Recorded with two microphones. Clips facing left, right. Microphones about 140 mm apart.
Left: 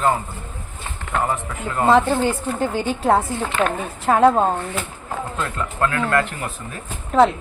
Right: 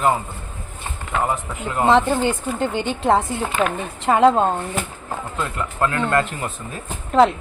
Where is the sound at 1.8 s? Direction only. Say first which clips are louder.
Left 1 dB; 5° left (ahead or behind).